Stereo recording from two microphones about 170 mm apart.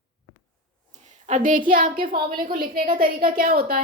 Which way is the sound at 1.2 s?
50° right (ahead or behind).